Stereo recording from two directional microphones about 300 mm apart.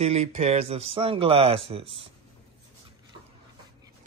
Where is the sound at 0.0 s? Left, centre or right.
Right.